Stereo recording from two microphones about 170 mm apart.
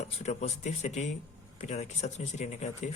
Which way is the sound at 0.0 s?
40° left (ahead or behind).